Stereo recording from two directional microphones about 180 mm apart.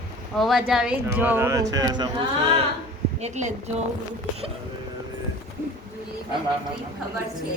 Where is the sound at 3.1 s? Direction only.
40° right (ahead or behind).